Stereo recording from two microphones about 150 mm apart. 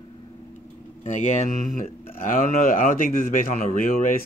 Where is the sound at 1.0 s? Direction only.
50° left (ahead or behind).